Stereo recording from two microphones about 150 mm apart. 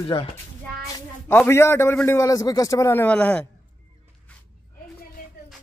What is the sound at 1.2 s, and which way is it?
A man's voice, 15° left (ahead or behind).